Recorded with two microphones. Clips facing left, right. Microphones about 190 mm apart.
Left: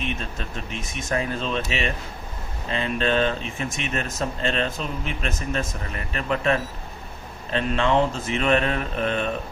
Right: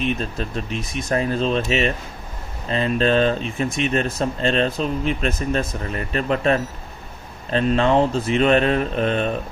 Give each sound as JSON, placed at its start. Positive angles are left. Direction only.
{"t": 0.0, "sound": "speech", "side_deg": -35}